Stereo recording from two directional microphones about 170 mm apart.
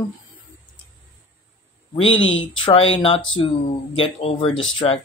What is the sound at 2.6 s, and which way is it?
Speech, 35° left (ahead or behind).